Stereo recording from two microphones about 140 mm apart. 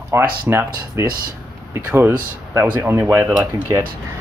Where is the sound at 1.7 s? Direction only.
15° right (ahead or behind).